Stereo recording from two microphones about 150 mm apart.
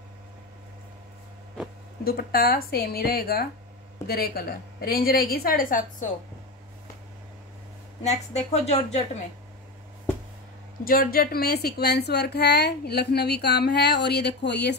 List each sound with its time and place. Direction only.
2.0 s a woman's voice: 80° left; by 6.0 s 65° left (ahead or behind)
8.0 s a woman's voice: 45° left (ahead or behind)
10.8 s a woman's voice: 75° left (ahead or behind); by 14.7 s 90° left